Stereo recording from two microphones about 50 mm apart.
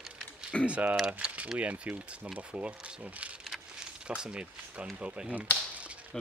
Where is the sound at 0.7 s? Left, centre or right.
Right.